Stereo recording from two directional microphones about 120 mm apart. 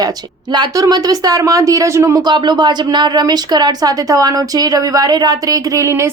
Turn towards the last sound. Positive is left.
turn(degrees=-25)  # may be behind; listen again after turning